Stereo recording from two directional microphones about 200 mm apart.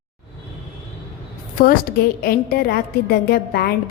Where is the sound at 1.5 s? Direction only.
45° left (ahead or behind).